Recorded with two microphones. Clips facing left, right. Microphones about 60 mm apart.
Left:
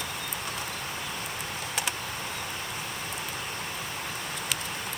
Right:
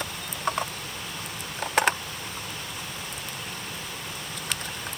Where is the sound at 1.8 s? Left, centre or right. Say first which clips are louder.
Right 11 dB; right.